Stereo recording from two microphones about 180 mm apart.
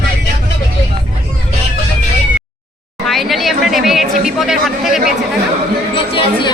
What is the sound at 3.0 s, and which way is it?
Speech, centre (ahead or behind).